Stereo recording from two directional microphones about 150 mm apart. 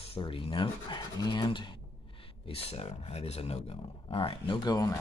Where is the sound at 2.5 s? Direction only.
40° left (ahead or behind).